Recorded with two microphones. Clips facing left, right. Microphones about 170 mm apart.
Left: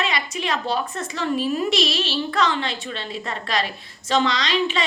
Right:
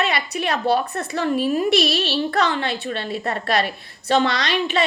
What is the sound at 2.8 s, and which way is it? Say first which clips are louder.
A woman's voice: right 5 dB; 50° right (ahead or behind).